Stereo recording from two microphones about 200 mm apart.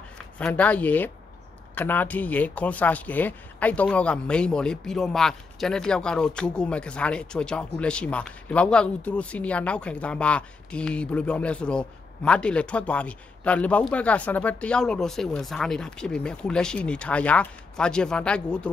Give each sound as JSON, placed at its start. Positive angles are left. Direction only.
{"t": 0.4, "sound": "speech", "side_deg": 5}